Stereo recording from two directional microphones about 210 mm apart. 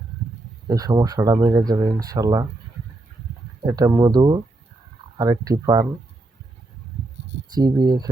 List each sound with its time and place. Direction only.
0.7 s speech: 15° right (ahead or behind)
3.7 s speech: 15° right (ahead or behind)
7.5 s speech: 20° right (ahead or behind)